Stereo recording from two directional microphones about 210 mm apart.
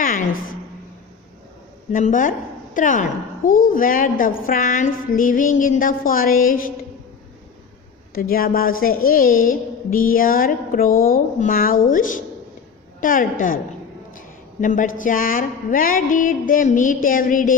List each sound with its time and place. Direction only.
0.0 s a sound: 40° left (ahead or behind)
1.9 s a woman's voice: 40° left (ahead or behind)
8.1 s a woman's voice: 45° left (ahead or behind)